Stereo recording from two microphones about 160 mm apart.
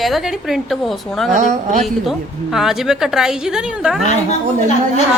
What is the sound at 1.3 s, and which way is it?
Speech, 45° right (ahead or behind).